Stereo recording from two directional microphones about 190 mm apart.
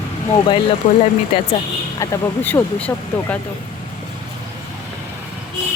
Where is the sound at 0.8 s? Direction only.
40° left (ahead or behind).